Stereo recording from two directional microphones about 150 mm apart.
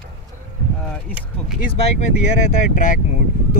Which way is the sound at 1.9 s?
55° left (ahead or behind).